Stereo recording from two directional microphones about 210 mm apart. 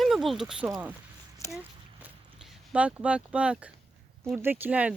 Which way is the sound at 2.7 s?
5° right (ahead or behind).